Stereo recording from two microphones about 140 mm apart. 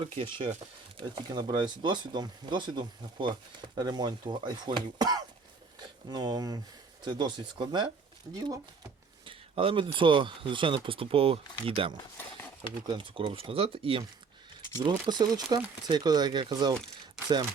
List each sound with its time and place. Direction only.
0.0 s speech: 35° right (ahead or behind)
9.2 s speech: 40° right (ahead or behind)